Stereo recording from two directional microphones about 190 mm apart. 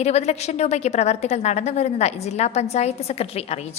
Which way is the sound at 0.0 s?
35° left (ahead or behind).